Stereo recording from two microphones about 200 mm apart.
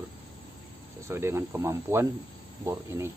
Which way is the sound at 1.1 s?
15° right (ahead or behind).